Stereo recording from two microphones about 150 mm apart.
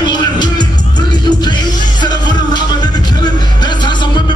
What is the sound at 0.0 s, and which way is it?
Music, 30° left (ahead or behind).